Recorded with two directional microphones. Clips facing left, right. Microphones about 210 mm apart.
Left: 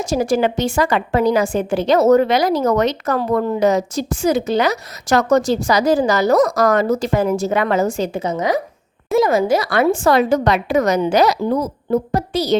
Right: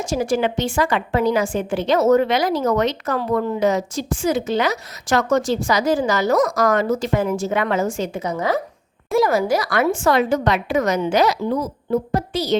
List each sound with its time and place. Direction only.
0.0 s a woman's voice: 40° left (ahead or behind)